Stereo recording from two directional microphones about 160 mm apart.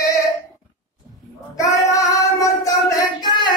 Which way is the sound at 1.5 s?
20° left (ahead or behind).